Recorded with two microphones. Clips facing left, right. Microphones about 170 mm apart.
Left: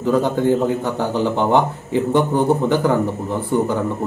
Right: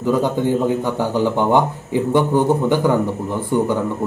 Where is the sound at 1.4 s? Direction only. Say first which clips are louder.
Even; 15° right (ahead or behind).